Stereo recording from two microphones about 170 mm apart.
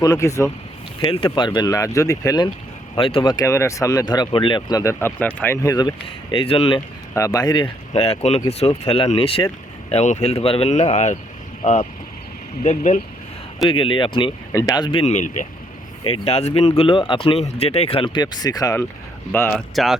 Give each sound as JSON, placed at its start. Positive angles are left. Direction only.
{"t": 0.0, "sound": "speech", "side_deg": 20}
{"t": 1.0, "sound": "speech", "side_deg": 30}
{"t": 2.9, "sound": "speech", "side_deg": 30}
{"t": 6.3, "sound": "speech", "side_deg": 35}
{"t": 7.1, "sound": "speech", "side_deg": 20}
{"t": 12.6, "sound": "speech", "side_deg": 45}
{"t": 13.7, "sound": "speech", "side_deg": 30}
{"t": 14.5, "sound": "speech", "side_deg": 20}
{"t": 14.8, "sound": "speech", "side_deg": 35}